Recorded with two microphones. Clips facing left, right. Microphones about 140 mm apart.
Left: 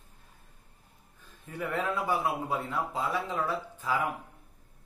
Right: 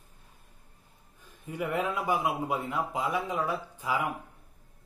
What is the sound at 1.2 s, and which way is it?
A man's voice, 15° right (ahead or behind).